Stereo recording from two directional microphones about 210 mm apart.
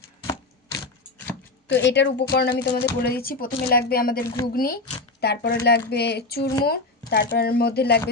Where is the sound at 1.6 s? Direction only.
55° left (ahead or behind).